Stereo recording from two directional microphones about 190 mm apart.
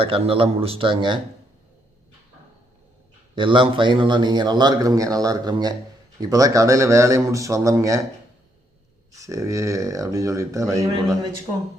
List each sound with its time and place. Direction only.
0.0 s a man's voice: 30° right (ahead or behind)
3.3 s a man's voice: 25° right (ahead or behind)
9.2 s a man's voice: 15° right (ahead or behind)